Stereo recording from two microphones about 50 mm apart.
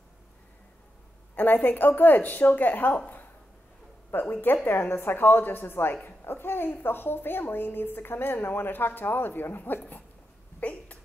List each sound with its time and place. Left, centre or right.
1.3 s a woman's voice: left
4.1 s a woman's voice: left
4.6 s a woman's voice: left
10.6 s a sound: left